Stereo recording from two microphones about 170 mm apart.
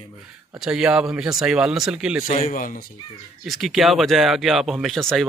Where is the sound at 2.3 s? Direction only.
45° left (ahead or behind).